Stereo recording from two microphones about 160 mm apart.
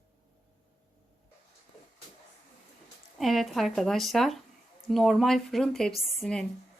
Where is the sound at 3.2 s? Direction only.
Centre (ahead or behind).